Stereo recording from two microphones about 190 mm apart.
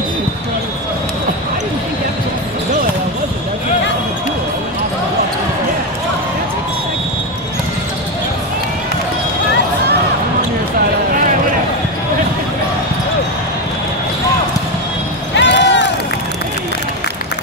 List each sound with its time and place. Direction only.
15.3 s run: 70° left (ahead or behind)